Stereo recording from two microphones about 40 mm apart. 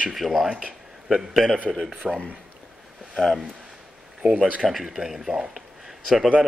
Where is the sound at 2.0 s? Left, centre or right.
Right.